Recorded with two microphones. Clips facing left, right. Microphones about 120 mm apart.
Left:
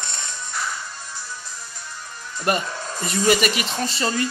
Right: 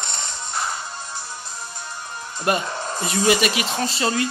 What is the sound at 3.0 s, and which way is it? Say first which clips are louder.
Speech: even; 5° right (ahead or behind).